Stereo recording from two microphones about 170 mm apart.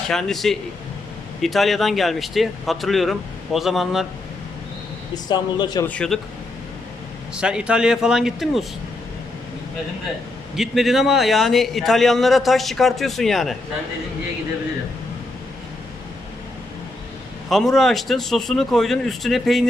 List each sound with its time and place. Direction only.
0.1 s a man's voice: centre (ahead or behind)
5.3 s a man's voice: 25° left (ahead or behind)
5.8 s speech: 5° left (ahead or behind)
7.3 s a man's voice: 5° right (ahead or behind)
10.5 s a man's voice: centre (ahead or behind)
17.5 s a man's voice: centre (ahead or behind)